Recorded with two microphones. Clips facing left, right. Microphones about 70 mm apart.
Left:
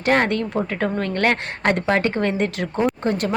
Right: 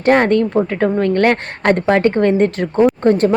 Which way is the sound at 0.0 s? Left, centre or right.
Right.